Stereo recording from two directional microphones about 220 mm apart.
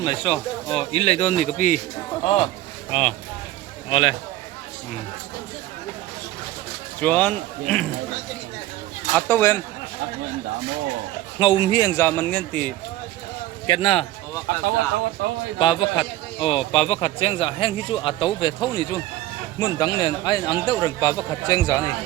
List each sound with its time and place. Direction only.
0.0 s a man's voice: 20° left (ahead or behind)
7.0 s a man's voice: 5° left (ahead or behind)
9.1 s a man's voice: 10° left (ahead or behind)
11.3 s a man's voice: 20° left (ahead or behind); by 12.7 s 5° left (ahead or behind)
13.7 s speech: 25° left (ahead or behind)
15.5 s a man's voice: 25° left (ahead or behind)